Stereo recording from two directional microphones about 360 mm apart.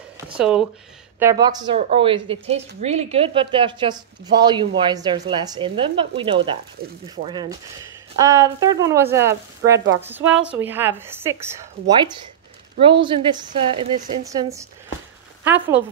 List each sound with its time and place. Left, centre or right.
0.4 s a woman's voice: centre
9.8 s speech: right
10.0 s a woman's voice: centre
13.0 s a woman's voice: centre